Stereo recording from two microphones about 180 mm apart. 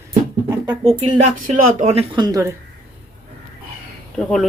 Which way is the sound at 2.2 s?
20° right (ahead or behind).